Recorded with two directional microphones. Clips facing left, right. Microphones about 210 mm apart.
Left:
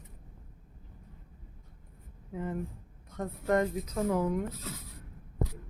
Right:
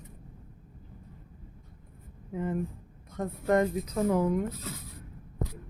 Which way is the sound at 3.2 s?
15° right (ahead or behind).